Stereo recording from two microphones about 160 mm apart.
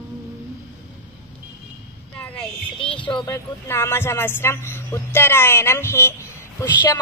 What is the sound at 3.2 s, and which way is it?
A man's voice, 20° left (ahead or behind).